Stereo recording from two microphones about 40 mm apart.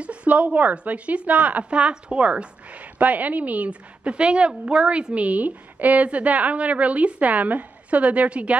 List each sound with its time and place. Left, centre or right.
0.0 s speech: right